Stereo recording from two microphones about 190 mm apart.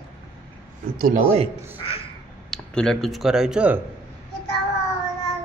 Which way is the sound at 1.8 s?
30° left (ahead or behind).